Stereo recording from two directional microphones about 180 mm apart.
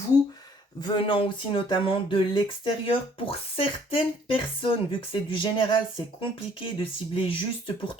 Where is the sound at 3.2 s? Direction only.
30° left (ahead or behind).